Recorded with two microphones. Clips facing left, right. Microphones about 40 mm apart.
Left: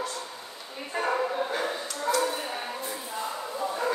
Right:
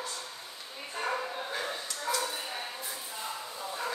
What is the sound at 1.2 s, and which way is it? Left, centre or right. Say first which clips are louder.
Dog: left 7 dB; left.